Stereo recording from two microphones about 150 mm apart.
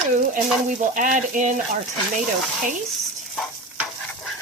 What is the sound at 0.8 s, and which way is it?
Speech, 60° right (ahead or behind).